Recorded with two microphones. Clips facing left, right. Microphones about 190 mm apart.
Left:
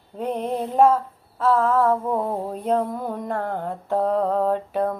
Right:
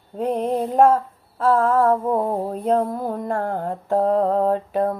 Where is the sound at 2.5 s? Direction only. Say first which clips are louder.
Right 2 dB; 40° right (ahead or behind).